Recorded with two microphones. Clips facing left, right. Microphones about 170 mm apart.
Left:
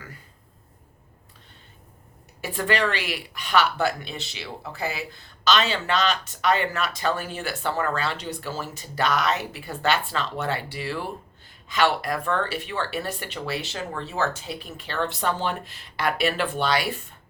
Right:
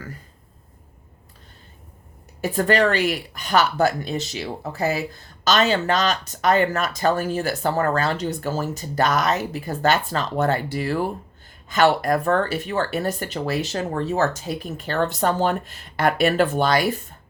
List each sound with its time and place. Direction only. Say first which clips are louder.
2.4 s speech: right 6 dB; 45° right (ahead or behind)